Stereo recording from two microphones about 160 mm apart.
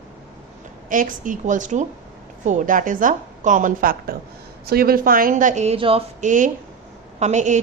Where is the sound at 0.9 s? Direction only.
55° right (ahead or behind); by 6.0 s 35° right (ahead or behind).